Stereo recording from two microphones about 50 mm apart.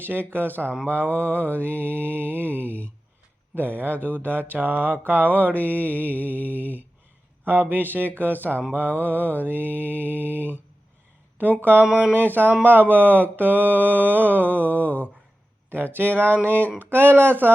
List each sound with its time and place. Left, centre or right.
0.0 s mantra: right
2.6 s mantra: left
3.5 s mantra: right
6.1 s mantra: left
7.4 s mantra: right
11.4 s speech: right
12.1 s mantra: right